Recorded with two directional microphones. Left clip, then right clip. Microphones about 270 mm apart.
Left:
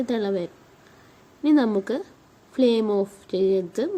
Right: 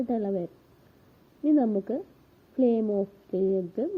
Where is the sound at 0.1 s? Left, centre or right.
Centre.